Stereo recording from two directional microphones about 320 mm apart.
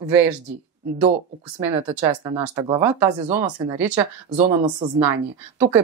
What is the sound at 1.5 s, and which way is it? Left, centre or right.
Speech, centre.